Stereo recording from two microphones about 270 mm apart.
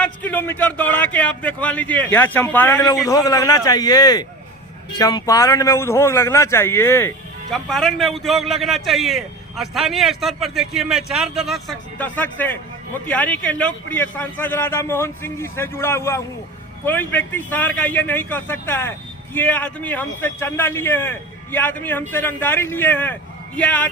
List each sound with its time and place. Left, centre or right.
0.0 s a man's voice: centre